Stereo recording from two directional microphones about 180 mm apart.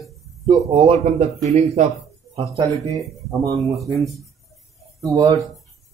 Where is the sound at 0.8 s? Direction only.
35° right (ahead or behind).